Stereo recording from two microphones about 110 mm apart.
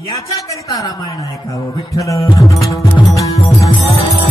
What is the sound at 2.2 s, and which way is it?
Music, 35° left (ahead or behind).